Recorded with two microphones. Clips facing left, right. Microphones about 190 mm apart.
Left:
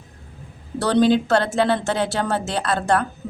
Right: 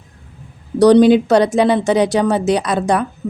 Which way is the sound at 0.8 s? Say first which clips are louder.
Right 8 dB; 15° right (ahead or behind).